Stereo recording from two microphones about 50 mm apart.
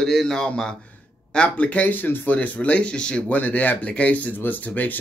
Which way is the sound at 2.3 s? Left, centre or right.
Left.